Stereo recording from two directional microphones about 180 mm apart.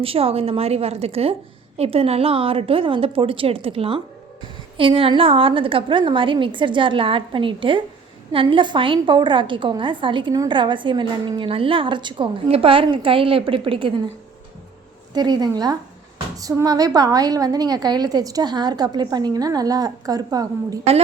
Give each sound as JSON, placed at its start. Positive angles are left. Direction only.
{"t": 0.0, "sound": "a woman's voice", "side_deg": -30}
{"t": 15.1, "sound": "a woman's voice", "side_deg": -25}